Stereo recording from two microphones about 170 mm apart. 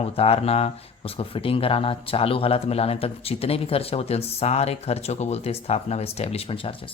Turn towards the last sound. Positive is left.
turn(degrees=30)  # may be behind; listen again after turning